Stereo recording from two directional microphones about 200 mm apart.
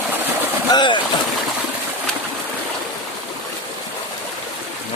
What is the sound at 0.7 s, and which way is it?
Speech, 20° left (ahead or behind).